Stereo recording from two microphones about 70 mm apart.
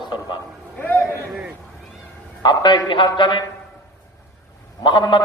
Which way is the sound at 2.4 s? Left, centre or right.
Left.